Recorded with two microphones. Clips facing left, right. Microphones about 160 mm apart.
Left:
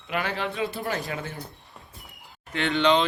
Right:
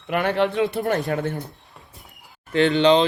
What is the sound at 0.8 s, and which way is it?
Speech, 50° right (ahead or behind).